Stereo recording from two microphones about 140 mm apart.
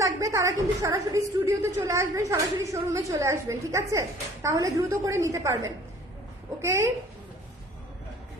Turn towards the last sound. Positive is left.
turn(degrees=-20)  # may be behind; listen again after turning